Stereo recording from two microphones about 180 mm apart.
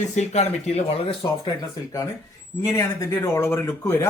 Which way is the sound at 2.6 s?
15° left (ahead or behind).